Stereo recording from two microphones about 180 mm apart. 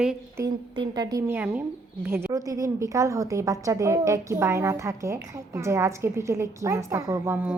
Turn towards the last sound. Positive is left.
turn(degrees=-10)  # may be behind; listen again after turning